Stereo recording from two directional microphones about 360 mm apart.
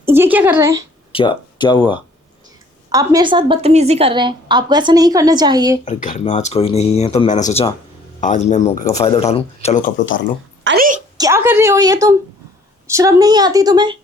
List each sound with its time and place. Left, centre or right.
0.0 s speech: centre
1.1 s speech: centre
2.9 s a woman's voice: centre
5.8 s speech: left
10.6 s a sound: right
11.2 s a woman's voice: centre